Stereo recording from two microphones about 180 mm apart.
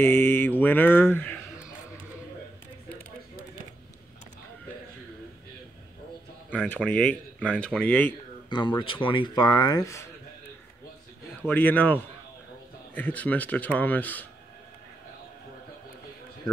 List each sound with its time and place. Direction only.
0.0 s mantra: 10° left (ahead or behind)
6.7 s mantra: 10° left (ahead or behind)
8.5 s speech: 25° left (ahead or behind)
11.4 s mantra: 10° left (ahead or behind)